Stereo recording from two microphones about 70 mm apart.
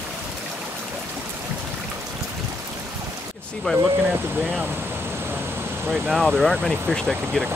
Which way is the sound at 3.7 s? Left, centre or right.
Centre.